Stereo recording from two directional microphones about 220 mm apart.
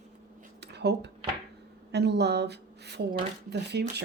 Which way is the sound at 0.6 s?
50° right (ahead or behind).